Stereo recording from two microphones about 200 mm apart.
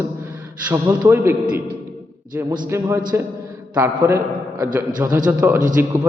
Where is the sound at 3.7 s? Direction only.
10° right (ahead or behind).